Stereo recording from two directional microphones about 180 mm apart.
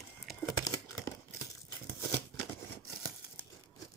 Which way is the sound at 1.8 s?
15° left (ahead or behind).